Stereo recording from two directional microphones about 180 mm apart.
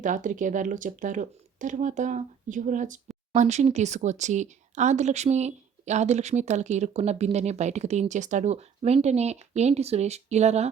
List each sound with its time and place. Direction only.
0.0 s speech: 45° right (ahead or behind)